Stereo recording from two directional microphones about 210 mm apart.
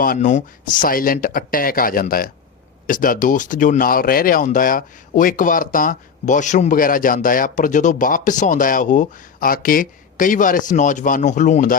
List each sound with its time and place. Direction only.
0.0 s speech: 40° left (ahead or behind)